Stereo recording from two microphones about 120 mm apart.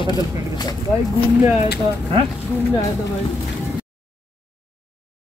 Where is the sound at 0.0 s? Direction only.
35° left (ahead or behind).